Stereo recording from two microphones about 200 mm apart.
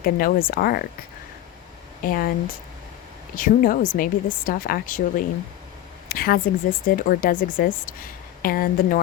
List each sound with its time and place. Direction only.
0.0 s speech: 45° left (ahead or behind)
2.0 s speech: 45° left (ahead or behind)